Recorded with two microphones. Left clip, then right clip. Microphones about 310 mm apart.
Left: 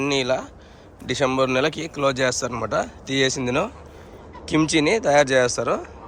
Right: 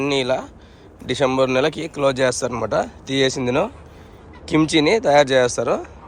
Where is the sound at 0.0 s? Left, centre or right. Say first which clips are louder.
Right 2 dB; centre.